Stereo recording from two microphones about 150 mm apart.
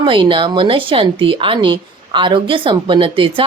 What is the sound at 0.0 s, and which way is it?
Speech, 35° right (ahead or behind).